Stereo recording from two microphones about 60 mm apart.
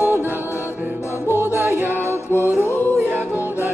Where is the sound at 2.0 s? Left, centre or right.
Left.